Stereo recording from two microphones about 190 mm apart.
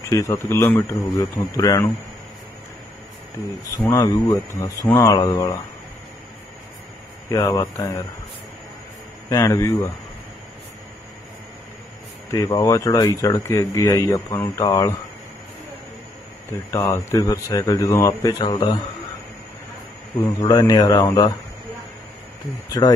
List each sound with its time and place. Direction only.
0.1 s speech: 15° left (ahead or behind)
3.8 s speech: 20° left (ahead or behind)
7.2 s speech: 20° left (ahead or behind)
9.3 s speech: 15° left (ahead or behind)
12.3 s speech: 20° left (ahead or behind)
16.7 s speech: 15° left (ahead or behind)
20.2 s speech: 20° left (ahead or behind)
22.7 s speech: 20° left (ahead or behind)